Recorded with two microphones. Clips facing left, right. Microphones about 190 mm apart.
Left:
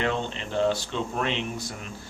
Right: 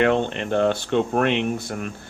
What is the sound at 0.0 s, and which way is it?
Speech, 60° right (ahead or behind).